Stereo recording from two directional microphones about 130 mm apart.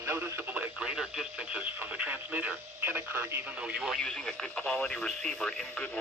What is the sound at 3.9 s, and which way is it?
Speech, 5° left (ahead or behind).